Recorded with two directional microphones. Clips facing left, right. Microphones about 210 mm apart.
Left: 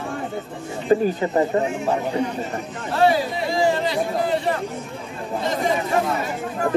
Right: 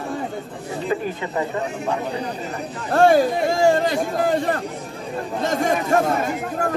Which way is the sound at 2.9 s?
45° right (ahead or behind).